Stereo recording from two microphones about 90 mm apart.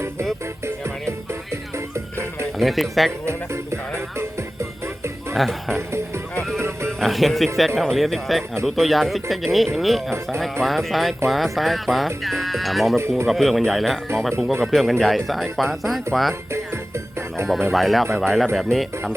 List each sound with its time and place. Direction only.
2.6 s speech: centre (ahead or behind)
3.2 s music: 30° right (ahead or behind)
5.3 s speech: 5° left (ahead or behind)
6.6 s music: 30° right (ahead or behind)
7.0 s speech: centre (ahead or behind)
13.0 s speech: 30° right (ahead or behind)
13.2 s speech: centre (ahead or behind)
17.7 s speech: centre (ahead or behind)